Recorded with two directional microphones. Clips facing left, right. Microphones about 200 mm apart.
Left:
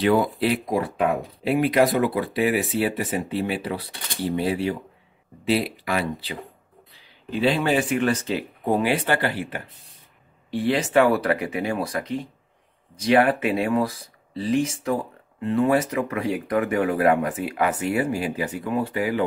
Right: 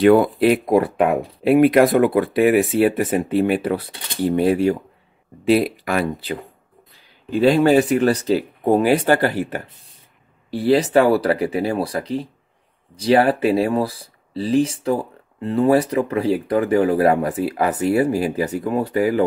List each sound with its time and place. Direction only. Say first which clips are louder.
0.0 s speech: right 7 dB; 55° right (ahead or behind)